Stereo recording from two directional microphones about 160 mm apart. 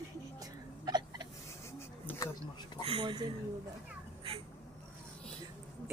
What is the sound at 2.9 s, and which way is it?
Speech, 30° right (ahead or behind).